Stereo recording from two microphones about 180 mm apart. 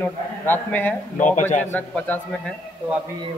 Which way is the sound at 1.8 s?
10° left (ahead or behind).